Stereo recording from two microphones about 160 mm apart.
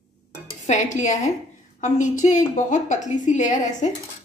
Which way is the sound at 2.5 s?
50° left (ahead or behind).